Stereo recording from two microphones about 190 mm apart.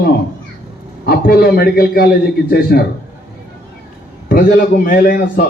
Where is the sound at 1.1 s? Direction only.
55° left (ahead or behind).